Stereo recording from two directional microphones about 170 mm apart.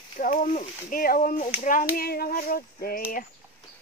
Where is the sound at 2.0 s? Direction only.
60° left (ahead or behind).